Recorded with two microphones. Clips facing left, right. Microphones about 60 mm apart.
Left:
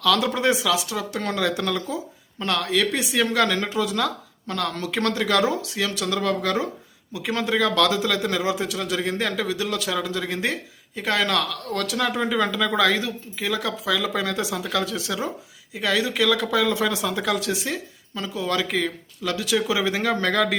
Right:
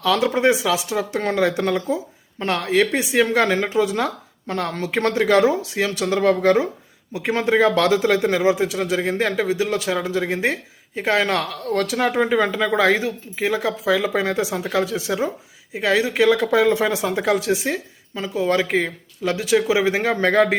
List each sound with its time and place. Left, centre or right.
0.0 s speech: right